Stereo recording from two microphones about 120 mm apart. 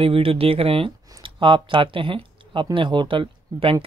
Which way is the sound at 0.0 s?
50° right (ahead or behind).